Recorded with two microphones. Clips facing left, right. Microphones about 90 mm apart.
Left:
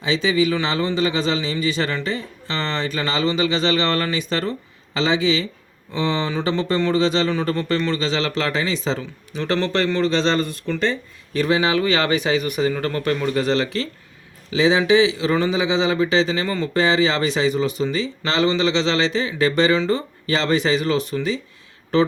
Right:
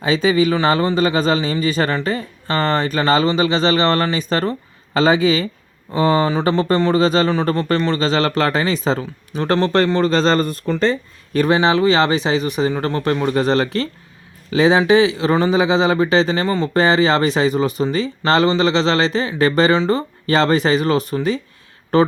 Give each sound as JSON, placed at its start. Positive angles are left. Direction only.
{"t": 0.0, "sound": "speech", "side_deg": -45}